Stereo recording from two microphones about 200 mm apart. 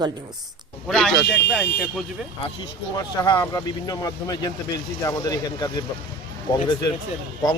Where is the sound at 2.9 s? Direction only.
20° left (ahead or behind).